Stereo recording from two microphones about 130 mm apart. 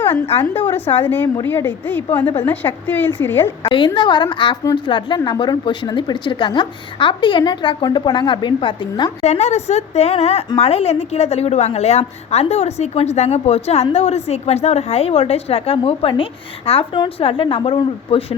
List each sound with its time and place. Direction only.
0.5 s a woman's voice: 15° left (ahead or behind)
3.7 s a woman's voice: 40° left (ahead or behind)
9.2 s a woman's voice: 60° left (ahead or behind)